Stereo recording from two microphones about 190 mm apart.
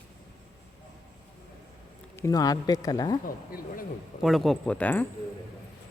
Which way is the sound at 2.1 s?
15° left (ahead or behind).